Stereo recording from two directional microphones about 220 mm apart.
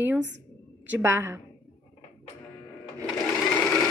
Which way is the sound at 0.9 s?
10° right (ahead or behind).